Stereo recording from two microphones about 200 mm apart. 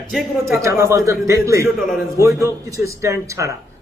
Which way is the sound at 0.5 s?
15° right (ahead or behind).